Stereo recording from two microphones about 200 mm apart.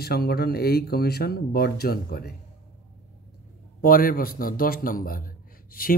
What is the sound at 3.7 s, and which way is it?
A man's voice, 45° left (ahead or behind).